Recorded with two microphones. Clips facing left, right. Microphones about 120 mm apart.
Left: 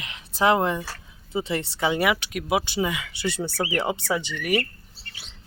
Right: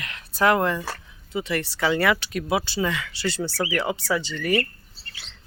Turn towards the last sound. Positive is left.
turn(degrees=10)  # may be behind; listen again after turning